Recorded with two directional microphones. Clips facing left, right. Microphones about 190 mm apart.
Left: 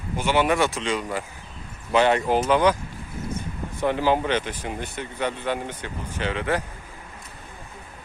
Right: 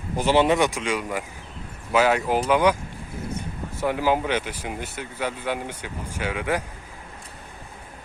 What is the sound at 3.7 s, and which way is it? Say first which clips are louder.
Speech: left 1 dB; 5° right (ahead or behind).